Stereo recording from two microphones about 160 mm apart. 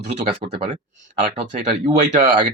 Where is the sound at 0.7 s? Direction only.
50° right (ahead or behind).